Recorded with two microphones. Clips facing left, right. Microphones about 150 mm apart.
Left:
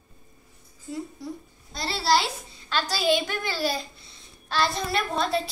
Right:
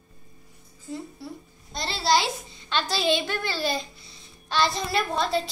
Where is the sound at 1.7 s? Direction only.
5° left (ahead or behind).